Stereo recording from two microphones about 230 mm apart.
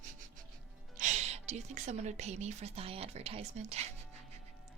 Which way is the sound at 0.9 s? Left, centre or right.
Right.